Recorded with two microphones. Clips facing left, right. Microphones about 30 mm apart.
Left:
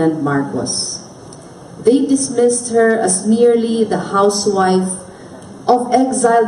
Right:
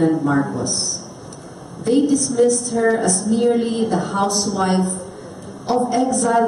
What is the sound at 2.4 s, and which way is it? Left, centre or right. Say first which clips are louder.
Speech: left 5 dB; centre.